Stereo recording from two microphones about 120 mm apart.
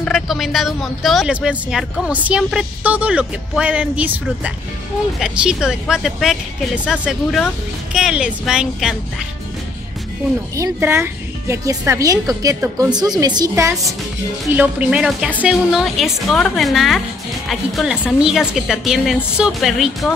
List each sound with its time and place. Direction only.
0.0 s a woman's voice: centre (ahead or behind)
10.5 s speech: 25° right (ahead or behind)
14.5 s a woman's voice: 10° right (ahead or behind)